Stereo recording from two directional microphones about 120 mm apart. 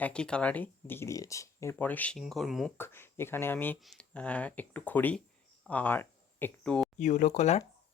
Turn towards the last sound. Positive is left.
turn(degrees=70)  # may be behind; listen again after turning